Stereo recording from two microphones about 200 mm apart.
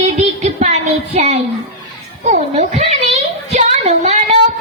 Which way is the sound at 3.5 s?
30° right (ahead or behind).